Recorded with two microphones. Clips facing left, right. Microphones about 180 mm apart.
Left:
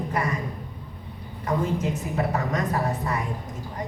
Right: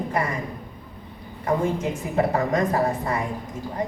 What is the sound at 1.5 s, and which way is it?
A woman's voice, 30° right (ahead or behind).